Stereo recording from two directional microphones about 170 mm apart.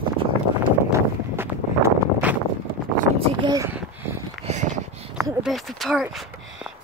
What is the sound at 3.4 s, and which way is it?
Speech, 20° right (ahead or behind).